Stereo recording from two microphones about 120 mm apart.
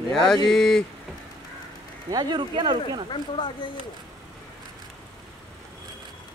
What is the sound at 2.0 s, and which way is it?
Speech, 35° right (ahead or behind).